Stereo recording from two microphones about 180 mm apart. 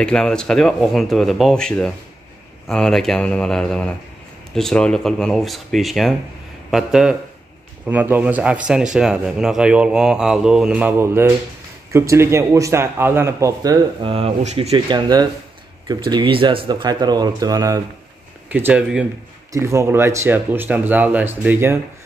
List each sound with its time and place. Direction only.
0.0 s speech: 5° left (ahead or behind); by 14.1 s 20° right (ahead or behind)
14.1 s speech: 35° right (ahead or behind); by 17.7 s 20° right (ahead or behind)
18.5 s speech: 10° right (ahead or behind)